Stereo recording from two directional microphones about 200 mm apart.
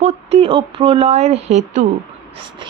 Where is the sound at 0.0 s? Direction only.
35° right (ahead or behind).